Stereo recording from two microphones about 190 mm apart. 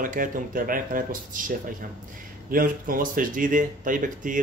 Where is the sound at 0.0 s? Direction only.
45° right (ahead or behind).